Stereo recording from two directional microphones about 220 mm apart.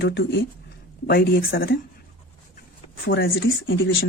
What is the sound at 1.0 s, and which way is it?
Speech, 50° left (ahead or behind).